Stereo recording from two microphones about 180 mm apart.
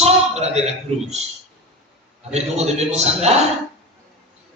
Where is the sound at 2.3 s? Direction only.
35° right (ahead or behind).